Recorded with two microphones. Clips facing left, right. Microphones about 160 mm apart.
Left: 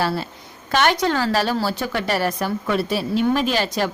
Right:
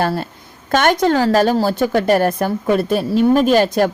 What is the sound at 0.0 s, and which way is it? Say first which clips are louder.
A woman's voice: right 4 dB; 50° right (ahead or behind).